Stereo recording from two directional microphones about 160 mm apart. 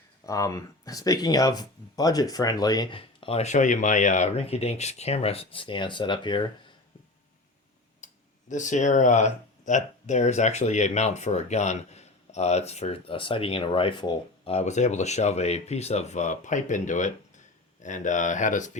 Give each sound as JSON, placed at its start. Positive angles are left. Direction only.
{"t": 0.3, "sound": "speech", "side_deg": 20}
{"t": 8.0, "sound": "speech", "side_deg": 50}
{"t": 14.5, "sound": "speech", "side_deg": 45}